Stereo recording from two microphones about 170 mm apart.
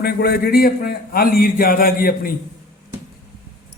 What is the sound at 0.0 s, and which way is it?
A man's voice, 70° left (ahead or behind).